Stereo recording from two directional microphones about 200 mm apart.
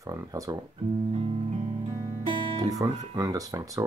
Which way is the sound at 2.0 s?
20° right (ahead or behind).